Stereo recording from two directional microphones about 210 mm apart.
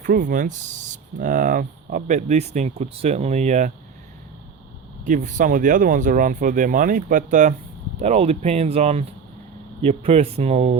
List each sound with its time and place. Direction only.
0.0 s speech: 40° right (ahead or behind)
5.0 s speech: 35° right (ahead or behind)